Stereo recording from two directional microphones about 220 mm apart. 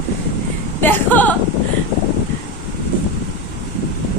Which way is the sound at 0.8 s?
5° left (ahead or behind).